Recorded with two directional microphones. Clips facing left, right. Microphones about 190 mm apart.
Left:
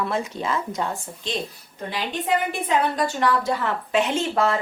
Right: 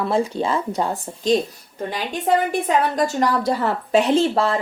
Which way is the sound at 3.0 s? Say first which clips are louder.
Right 3 dB; 40° right (ahead or behind).